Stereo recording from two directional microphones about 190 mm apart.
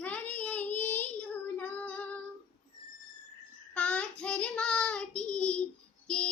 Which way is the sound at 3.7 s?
5° left (ahead or behind).